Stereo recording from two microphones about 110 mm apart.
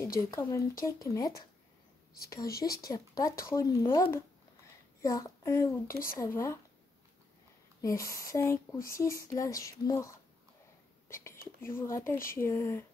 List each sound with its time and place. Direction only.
0.0 s speech: 25° left (ahead or behind)
7.8 s speech: 30° left (ahead or behind)